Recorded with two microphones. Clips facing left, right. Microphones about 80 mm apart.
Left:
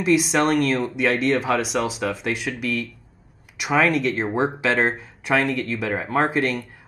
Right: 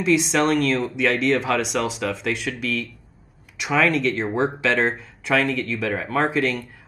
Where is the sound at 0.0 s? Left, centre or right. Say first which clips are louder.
Even; centre.